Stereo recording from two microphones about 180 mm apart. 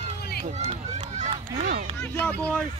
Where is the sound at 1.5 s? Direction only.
55° right (ahead or behind).